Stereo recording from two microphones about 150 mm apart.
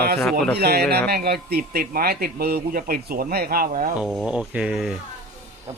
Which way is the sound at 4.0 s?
5° right (ahead or behind).